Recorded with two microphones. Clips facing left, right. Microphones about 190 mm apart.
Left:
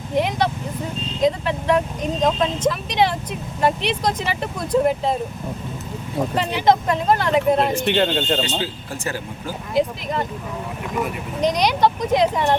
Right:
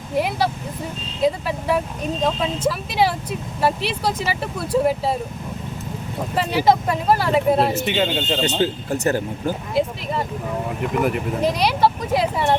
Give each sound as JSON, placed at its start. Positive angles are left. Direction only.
{"t": 0.2, "sound": "speech", "side_deg": -5}
{"t": 6.6, "sound": "speech", "side_deg": -5}
{"t": 8.4, "sound": "speech", "side_deg": -45}
{"t": 9.7, "sound": "speech", "side_deg": -5}
{"t": 11.4, "sound": "speech", "side_deg": -5}